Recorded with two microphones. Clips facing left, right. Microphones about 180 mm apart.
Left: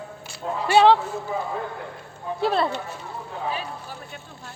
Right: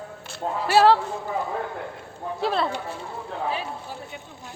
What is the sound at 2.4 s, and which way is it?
Speech, centre (ahead or behind).